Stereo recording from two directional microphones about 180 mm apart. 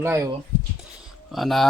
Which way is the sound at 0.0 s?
15° right (ahead or behind).